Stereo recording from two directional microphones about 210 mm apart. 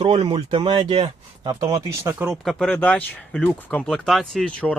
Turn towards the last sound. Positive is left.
turn(degrees=5)  # may be behind; listen again after turning